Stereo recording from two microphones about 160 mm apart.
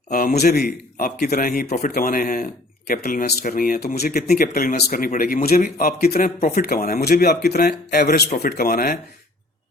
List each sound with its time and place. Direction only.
0.1 s speech: 65° left (ahead or behind)